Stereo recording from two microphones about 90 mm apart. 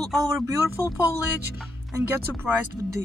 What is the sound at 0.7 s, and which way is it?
Speech, 40° left (ahead or behind).